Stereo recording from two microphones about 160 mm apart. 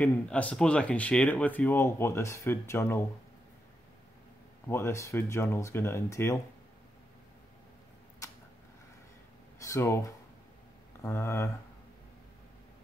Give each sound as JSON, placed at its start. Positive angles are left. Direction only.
{"t": 0.0, "sound": "speech", "side_deg": 10}
{"t": 4.6, "sound": "speech", "side_deg": 15}
{"t": 9.6, "sound": "speech", "side_deg": 20}